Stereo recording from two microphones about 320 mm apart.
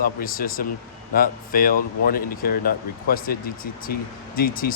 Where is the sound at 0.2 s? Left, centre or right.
Left.